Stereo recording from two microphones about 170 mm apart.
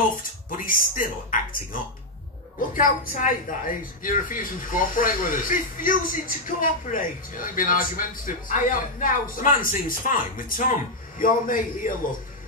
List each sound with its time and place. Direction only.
0.5 s speech: 55° left (ahead or behind)